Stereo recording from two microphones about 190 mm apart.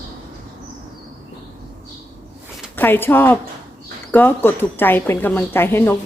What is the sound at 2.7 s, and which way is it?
Speech, 10° left (ahead or behind).